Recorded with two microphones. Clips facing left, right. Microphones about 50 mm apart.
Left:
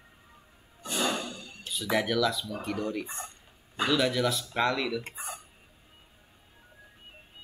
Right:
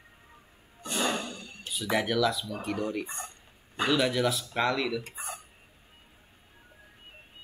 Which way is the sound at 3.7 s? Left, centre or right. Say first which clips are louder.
Even; centre.